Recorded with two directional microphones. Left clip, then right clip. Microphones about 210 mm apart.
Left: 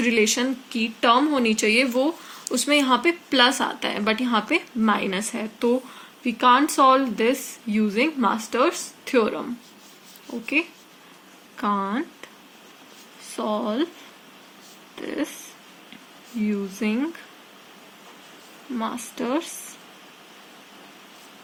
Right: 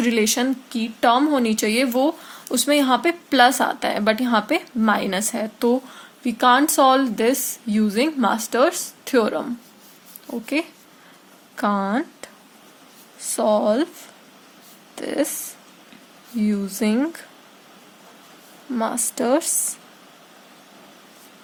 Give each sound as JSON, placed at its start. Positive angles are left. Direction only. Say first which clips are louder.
{"t": 0.0, "sound": "speech", "louder": "right 1 dB", "side_deg": -50}
{"t": 13.3, "sound": "speech", "louder": "right 8 dB", "side_deg": -60}
{"t": 14.9, "sound": "speech", "louder": "right 6 dB", "side_deg": -60}
{"t": 16.5, "sound": "speech", "louder": "right 3 dB", "side_deg": -65}
{"t": 18.8, "sound": "speech", "louder": "right 6 dB", "side_deg": -60}